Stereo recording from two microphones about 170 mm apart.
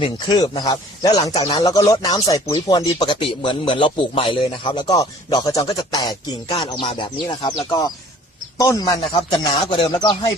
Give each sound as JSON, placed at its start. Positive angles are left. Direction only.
{"t": 0.0, "sound": "a man's voice", "side_deg": 25}
{"t": 1.3, "sound": "speech", "side_deg": 35}
{"t": 1.5, "sound": "a man's voice", "side_deg": 20}
{"t": 8.5, "sound": "a man's voice", "side_deg": 20}